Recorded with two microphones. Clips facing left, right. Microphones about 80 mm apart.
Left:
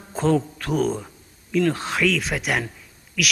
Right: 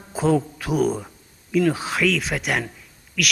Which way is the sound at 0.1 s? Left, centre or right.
Centre.